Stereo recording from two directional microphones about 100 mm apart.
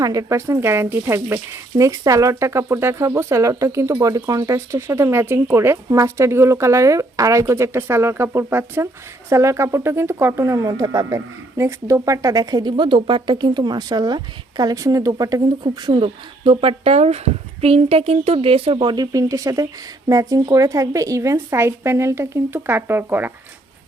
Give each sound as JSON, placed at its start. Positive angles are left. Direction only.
{"t": 0.0, "sound": "speech", "side_deg": -35}
{"t": 15.7, "sound": "speech", "side_deg": -55}
{"t": 18.8, "sound": "speech", "side_deg": -45}